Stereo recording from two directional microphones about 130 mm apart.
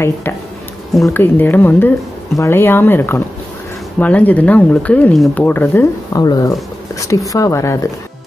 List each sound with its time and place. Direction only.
1.0 s speech: 15° left (ahead or behind)
6.1 s speech: 30° left (ahead or behind)